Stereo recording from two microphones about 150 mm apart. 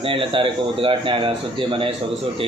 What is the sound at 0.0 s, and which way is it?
Speech, 35° right (ahead or behind).